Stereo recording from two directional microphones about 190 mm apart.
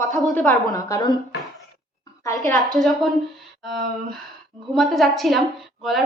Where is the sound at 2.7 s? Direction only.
Centre (ahead or behind).